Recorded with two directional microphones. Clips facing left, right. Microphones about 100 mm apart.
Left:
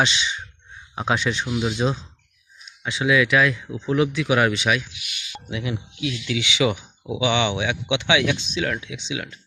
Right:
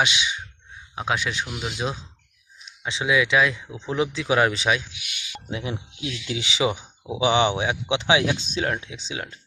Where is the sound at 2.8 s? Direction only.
25° right (ahead or behind).